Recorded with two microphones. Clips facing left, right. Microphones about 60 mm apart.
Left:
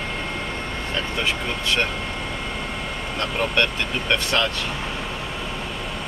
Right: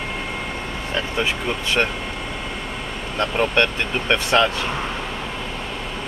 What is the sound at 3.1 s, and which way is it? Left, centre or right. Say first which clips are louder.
Speech: right 4 dB; centre.